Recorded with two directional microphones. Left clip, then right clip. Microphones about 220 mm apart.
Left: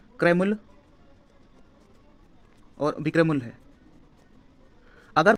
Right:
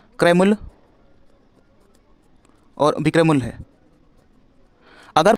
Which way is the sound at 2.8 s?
50° right (ahead or behind).